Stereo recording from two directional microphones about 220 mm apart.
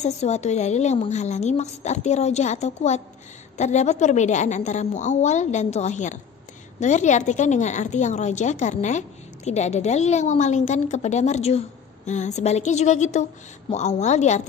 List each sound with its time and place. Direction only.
0.0 s a woman's voice: 30° left (ahead or behind)